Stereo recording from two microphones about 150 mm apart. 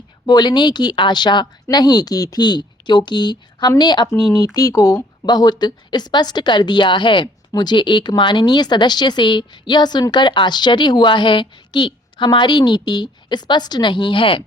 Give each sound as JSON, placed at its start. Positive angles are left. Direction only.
{"t": 0.3, "sound": "a woman's voice", "side_deg": 30}